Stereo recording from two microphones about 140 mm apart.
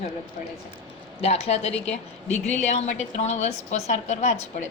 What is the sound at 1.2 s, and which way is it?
A woman's voice, 50° left (ahead or behind).